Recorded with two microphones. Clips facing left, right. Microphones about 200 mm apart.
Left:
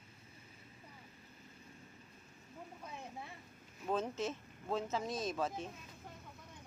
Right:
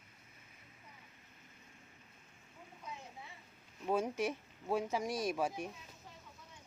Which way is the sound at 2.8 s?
55° left (ahead or behind).